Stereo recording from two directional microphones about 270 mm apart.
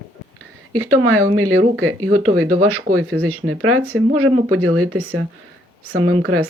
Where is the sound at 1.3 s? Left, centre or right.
Right.